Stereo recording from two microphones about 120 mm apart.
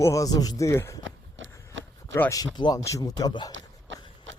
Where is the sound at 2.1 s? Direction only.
25° left (ahead or behind).